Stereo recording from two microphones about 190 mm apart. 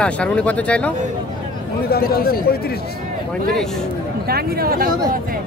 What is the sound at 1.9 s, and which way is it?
Speech, 55° left (ahead or behind).